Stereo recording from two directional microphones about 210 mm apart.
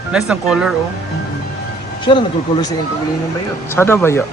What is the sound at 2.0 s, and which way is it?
Speech, 25° left (ahead or behind).